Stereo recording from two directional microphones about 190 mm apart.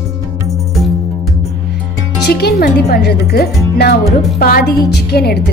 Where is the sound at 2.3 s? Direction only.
55° left (ahead or behind).